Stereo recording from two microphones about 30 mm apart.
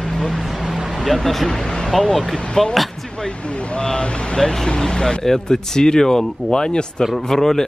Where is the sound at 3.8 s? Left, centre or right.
Left.